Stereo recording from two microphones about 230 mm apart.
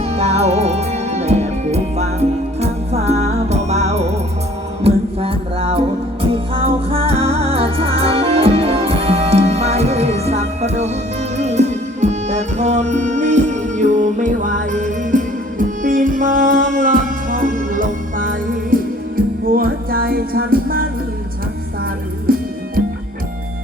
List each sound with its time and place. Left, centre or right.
0.0 s music: right
22.3 s music: right